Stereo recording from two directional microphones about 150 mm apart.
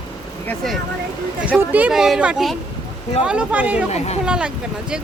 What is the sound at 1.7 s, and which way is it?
Speech, 10° right (ahead or behind).